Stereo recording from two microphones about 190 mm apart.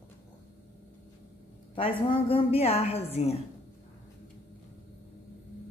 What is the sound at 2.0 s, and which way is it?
A woman's voice, 30° left (ahead or behind).